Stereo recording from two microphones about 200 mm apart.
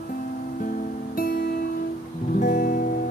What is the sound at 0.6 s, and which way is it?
Guitar, 45° left (ahead or behind).